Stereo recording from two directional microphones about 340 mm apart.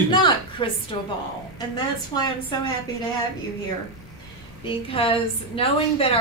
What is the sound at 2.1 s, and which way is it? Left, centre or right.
Speech, centre.